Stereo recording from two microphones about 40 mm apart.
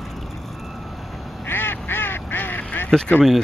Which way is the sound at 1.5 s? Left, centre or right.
Left.